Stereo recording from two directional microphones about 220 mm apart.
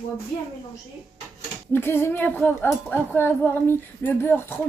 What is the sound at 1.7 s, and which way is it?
Speech, 10° left (ahead or behind).